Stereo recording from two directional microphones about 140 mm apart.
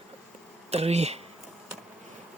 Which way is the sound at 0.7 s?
50° right (ahead or behind).